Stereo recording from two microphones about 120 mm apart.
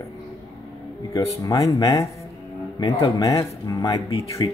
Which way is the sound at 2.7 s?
35° left (ahead or behind).